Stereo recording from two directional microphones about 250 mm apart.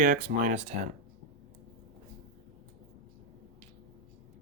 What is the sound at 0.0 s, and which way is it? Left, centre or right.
Speech, right.